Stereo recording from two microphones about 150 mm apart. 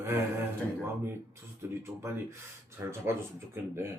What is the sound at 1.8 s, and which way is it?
Speech, 15° right (ahead or behind).